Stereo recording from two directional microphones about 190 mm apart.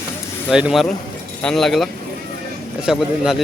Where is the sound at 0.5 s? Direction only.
5° right (ahead or behind).